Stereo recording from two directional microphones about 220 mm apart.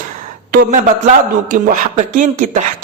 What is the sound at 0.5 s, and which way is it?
A man's voice, 40° right (ahead or behind).